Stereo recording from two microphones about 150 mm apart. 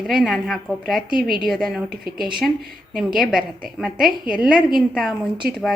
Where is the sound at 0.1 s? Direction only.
Centre (ahead or behind).